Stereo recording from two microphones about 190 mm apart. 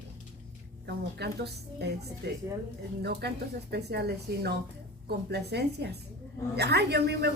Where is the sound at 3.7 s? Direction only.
55° right (ahead or behind).